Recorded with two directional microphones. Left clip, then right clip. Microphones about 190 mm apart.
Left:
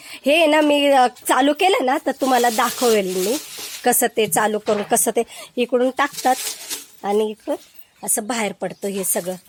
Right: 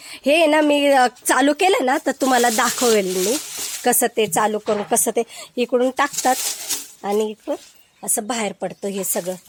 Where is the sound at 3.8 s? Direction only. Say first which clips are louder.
Even; centre (ahead or behind).